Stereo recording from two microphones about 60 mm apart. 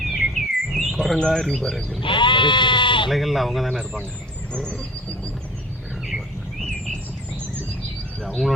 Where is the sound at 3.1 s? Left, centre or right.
Centre.